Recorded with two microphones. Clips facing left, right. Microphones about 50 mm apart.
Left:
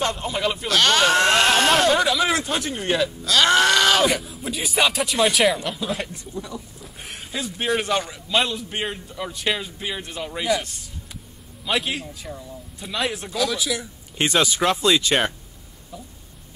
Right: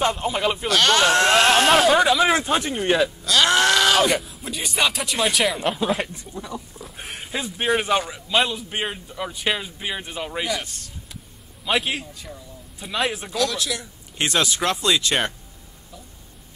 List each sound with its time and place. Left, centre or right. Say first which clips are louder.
0.0 s speech: right 2 dB; centre
2.0 s a man's voice: right 3 dB; centre
3.3 s speech: left 2 dB; centre
5.6 s speech: right 5 dB; right
5.9 s a man's voice: right 4 dB; centre
6.8 s a sound: right 2 dB; centre
7.3 s a man's voice: right 1 dB; centre
11.6 s speech: right 1 dB; centre